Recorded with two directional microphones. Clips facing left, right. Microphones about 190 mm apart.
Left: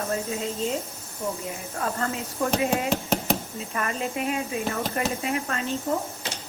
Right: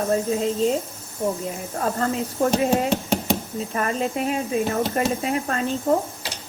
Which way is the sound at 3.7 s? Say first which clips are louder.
Right 4 dB; 40° right (ahead or behind).